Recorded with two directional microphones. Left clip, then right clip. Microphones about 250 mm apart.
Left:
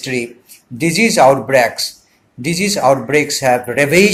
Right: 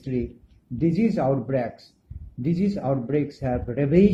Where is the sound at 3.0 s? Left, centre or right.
Left.